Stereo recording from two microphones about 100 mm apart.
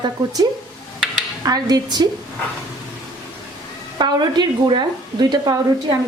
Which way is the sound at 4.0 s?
50° right (ahead or behind).